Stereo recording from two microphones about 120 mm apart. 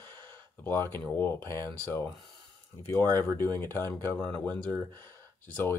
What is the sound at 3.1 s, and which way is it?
Speech, 15° left (ahead or behind).